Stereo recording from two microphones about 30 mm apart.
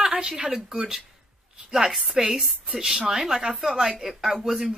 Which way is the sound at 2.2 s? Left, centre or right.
Centre.